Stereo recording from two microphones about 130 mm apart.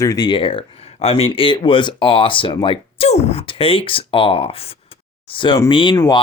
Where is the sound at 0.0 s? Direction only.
30° left (ahead or behind).